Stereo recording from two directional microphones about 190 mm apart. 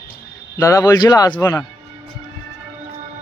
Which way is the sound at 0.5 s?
15° left (ahead or behind).